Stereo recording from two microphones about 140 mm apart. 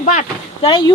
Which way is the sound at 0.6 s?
35° left (ahead or behind).